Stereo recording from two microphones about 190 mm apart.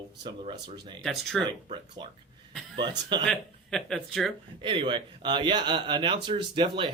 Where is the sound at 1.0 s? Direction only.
Centre (ahead or behind).